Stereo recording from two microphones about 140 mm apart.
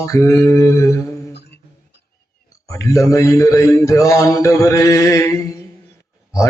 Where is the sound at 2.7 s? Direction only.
20° left (ahead or behind).